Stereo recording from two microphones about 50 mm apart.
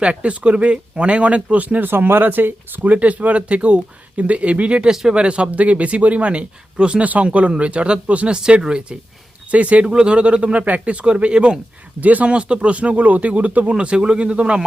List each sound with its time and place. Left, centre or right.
0.0 s speech: right
2.9 s speech: right
11.9 s speech: right
13.7 s speech: centre